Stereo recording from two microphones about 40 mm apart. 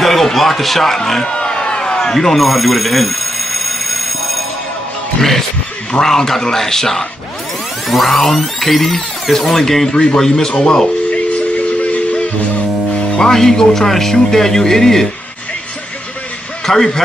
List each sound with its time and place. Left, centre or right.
0.0 s speech: centre
1.2 s telephone bell ringing: left; by 4.5 s centre
5.9 s speech: centre
9.8 s speech: left
11.1 s a sound: left
13.2 s speech: centre
16.6 s speech: centre